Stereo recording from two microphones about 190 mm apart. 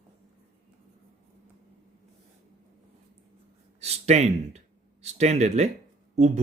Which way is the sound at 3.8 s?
35° right (ahead or behind).